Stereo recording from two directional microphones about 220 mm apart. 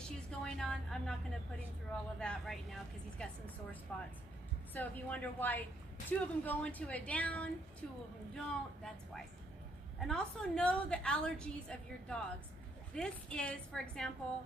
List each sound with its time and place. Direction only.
0.0 s a woman's voice: centre (ahead or behind)
2.1 s a woman's voice: centre (ahead or behind)